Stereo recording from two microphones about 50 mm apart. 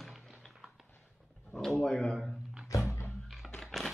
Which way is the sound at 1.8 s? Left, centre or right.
Centre.